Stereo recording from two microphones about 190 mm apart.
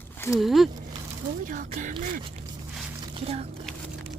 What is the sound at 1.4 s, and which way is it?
Speech, 45° right (ahead or behind).